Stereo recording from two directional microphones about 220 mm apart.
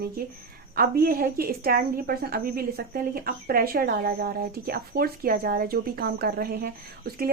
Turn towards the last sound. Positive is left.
turn(degrees=-45)  # may be behind; listen again after turning